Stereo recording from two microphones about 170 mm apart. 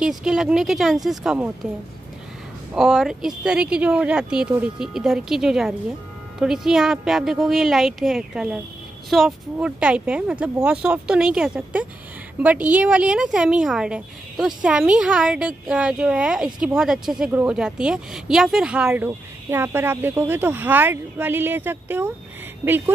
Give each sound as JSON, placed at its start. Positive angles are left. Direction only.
{"t": 0.0, "sound": "speech", "side_deg": -5}
{"t": 2.7, "sound": "speech", "side_deg": -5}